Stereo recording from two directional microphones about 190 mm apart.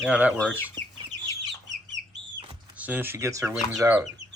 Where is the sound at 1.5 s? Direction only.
70° right (ahead or behind).